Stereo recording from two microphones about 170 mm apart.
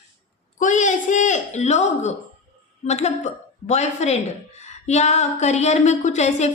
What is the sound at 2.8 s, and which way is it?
A woman's voice, 40° left (ahead or behind).